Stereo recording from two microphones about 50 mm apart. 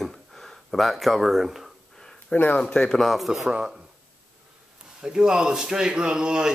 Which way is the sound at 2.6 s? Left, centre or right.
Centre.